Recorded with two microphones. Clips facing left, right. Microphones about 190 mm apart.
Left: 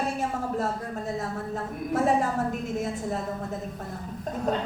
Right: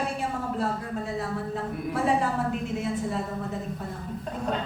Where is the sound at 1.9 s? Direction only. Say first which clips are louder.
Left 2 dB; 45° left (ahead or behind).